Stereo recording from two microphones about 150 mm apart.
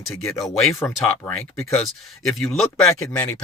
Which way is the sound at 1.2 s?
15° left (ahead or behind).